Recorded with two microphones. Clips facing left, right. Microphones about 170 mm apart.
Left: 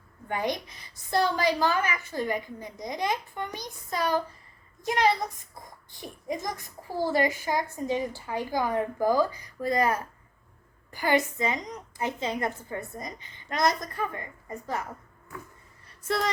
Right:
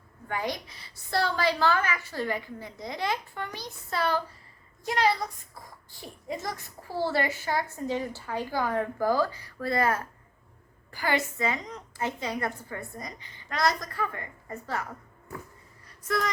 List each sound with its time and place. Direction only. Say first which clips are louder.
0.3 s a woman's voice: left 2 dB; 20° left (ahead or behind)
16.0 s a woman's voice: left 1 dB; 30° left (ahead or behind)